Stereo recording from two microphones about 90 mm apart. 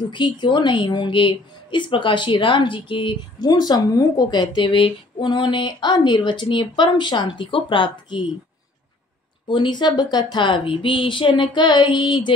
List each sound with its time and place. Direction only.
0.1 s speech: 60° left (ahead or behind)
3.3 s speech: 50° left (ahead or behind)
9.5 s speech: 60° left (ahead or behind)